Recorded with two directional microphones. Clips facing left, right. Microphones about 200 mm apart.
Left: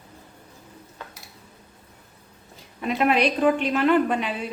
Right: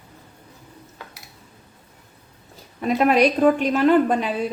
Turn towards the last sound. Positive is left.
turn(degrees=-40)  # may be behind; listen again after turning